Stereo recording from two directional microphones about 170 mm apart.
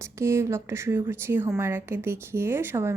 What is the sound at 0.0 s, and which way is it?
A woman's voice, 15° right (ahead or behind).